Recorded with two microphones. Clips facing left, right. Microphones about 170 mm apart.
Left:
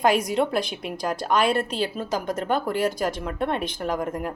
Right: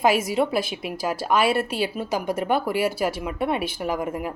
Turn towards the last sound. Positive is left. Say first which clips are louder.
# even
turn(degrees=-5)  # may be behind; listen again after turning